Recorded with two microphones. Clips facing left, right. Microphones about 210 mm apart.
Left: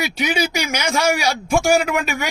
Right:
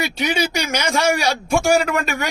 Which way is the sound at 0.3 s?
5° left (ahead or behind).